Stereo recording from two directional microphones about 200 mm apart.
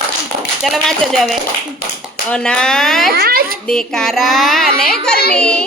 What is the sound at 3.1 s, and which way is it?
Speech, 50° right (ahead or behind).